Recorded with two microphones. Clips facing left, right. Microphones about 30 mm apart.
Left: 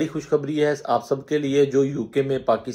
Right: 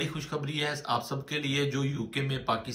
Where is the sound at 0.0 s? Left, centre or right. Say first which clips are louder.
Left 11 dB; right.